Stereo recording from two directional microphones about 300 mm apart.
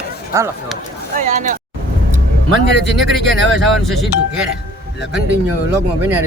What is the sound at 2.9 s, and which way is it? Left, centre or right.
Speech, centre.